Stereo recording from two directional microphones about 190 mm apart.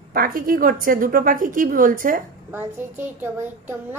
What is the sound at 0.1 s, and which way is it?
A woman's voice, 50° right (ahead or behind).